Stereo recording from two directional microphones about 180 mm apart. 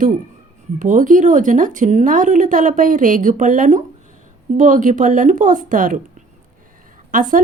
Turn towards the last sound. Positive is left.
turn(degrees=-45)  # may be behind; listen again after turning